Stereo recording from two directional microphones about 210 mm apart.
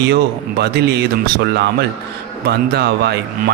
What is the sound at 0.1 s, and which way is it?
Speech, 50° right (ahead or behind).